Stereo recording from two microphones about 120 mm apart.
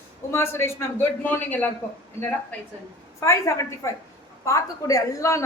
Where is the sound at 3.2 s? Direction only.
25° left (ahead or behind).